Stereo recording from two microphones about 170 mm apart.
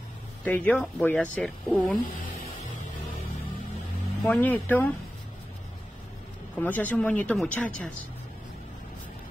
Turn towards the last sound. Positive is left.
turn(degrees=5)  # may be behind; listen again after turning